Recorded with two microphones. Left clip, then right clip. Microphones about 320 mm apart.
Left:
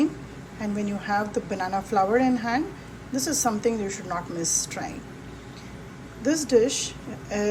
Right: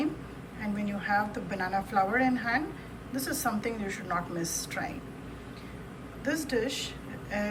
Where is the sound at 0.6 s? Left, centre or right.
Centre.